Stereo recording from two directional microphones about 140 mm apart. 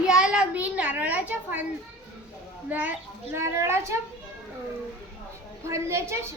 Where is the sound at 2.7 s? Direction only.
10° right (ahead or behind).